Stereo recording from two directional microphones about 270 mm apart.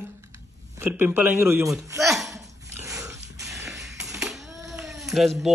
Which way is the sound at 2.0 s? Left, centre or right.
Centre.